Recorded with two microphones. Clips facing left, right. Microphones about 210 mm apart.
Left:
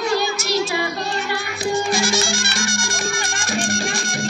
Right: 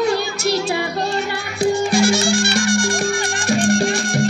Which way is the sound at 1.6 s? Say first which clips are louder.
Right 6 dB; 60° right (ahead or behind).